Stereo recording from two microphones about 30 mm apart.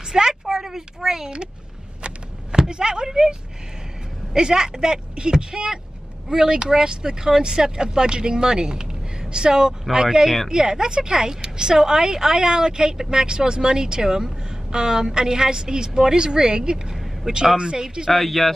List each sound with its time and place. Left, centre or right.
0.1 s a sound: centre
2.7 s speech: right
18.1 s speech: centre